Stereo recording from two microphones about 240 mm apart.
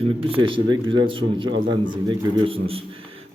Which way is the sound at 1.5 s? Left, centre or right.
Right.